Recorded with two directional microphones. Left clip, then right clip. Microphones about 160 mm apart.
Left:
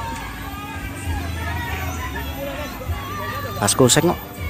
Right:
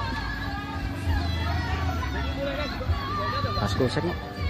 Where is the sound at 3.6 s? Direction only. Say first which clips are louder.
Left 16 dB; 25° left (ahead or behind).